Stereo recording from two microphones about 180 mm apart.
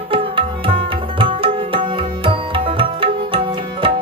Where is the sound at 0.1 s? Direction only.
30° right (ahead or behind).